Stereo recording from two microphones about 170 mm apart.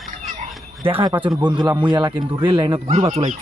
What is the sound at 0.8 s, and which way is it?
A man's voice, 25° right (ahead or behind).